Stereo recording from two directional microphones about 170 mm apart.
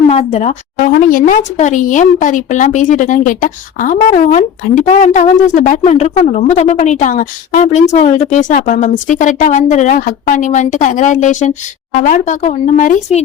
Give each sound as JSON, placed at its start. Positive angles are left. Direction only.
{"t": 0.1, "sound": "a woman's voice", "side_deg": 40}
{"t": 0.9, "sound": "a woman's voice", "side_deg": 50}